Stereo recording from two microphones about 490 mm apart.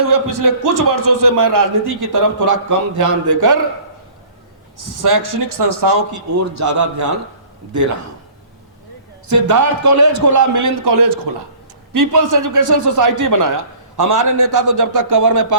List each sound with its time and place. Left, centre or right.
0.0 s a man's voice: right
4.9 s a man's voice: right
9.2 s a man's voice: right